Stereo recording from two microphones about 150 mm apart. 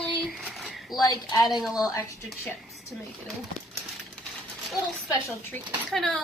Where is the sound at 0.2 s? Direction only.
Centre (ahead or behind).